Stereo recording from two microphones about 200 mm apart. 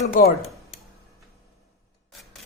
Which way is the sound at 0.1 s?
50° left (ahead or behind).